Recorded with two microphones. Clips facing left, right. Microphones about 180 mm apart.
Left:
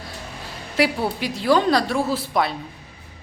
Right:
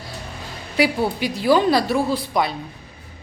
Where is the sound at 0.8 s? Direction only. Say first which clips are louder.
Right 2 dB; centre (ahead or behind).